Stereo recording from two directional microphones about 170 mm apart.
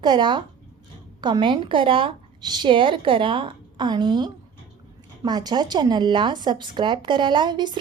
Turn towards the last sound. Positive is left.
turn(degrees=-25)  # may be behind; listen again after turning